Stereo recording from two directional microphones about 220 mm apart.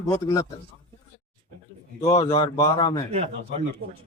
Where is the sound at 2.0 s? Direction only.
20° left (ahead or behind).